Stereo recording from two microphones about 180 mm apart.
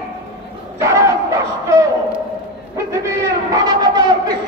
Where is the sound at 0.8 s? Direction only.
15° right (ahead or behind).